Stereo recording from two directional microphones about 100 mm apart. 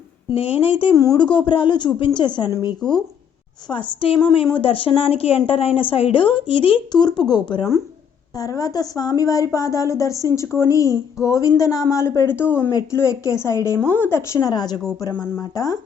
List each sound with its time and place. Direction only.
0.3 s a woman's voice: 75° left (ahead or behind)
0.9 s a woman's voice: 35° left (ahead or behind)
1.2 s speech: 55° left (ahead or behind)
2.8 s speech: 5° left (ahead or behind)
3.7 s a woman's voice: 60° left (ahead or behind)
6.9 s speech: 50° left (ahead or behind)
8.4 s a woman's voice: 35° left (ahead or behind)
15.2 s a woman's voice: 30° left (ahead or behind)